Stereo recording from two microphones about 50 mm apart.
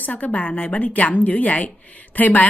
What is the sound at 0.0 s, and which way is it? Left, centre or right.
A woman's voice, left.